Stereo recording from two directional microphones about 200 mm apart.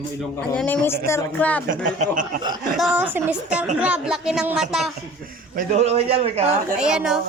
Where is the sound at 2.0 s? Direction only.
40° right (ahead or behind).